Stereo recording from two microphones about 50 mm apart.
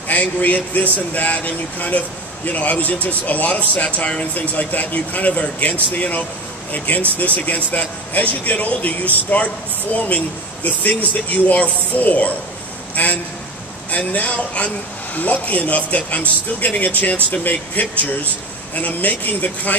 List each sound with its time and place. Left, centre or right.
0.1 s a man's voice: left